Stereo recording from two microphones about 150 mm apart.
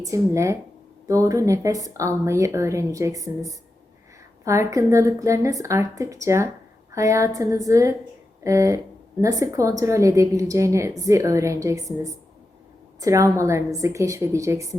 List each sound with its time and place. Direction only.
0.0 s a woman's voice: 20° right (ahead or behind)